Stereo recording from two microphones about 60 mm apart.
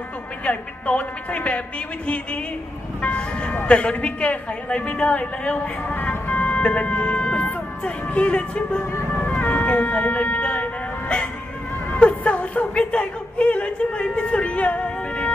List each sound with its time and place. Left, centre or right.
0.5 s a woman's voice: left
3.0 s a woman's voice: left
5.9 s vehicle: left
7.8 s speech: left
9.4 s vehicle: left
11.9 s a sound: left